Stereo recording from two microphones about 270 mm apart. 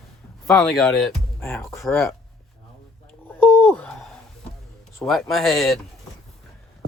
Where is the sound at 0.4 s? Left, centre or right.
Centre.